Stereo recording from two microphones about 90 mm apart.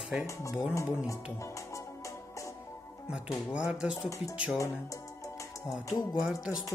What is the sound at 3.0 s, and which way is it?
Speech, 10° right (ahead or behind).